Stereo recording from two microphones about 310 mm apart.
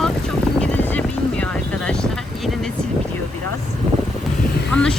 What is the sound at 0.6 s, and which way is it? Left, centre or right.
Vehicle, centre.